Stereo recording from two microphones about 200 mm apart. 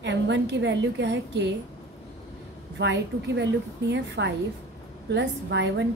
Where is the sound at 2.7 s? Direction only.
65° right (ahead or behind).